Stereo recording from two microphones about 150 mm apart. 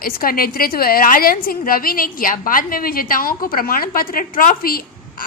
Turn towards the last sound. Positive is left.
turn(degrees=75)  # may be behind; listen again after turning